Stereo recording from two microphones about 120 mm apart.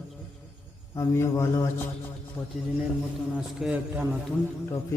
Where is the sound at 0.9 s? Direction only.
25° left (ahead or behind).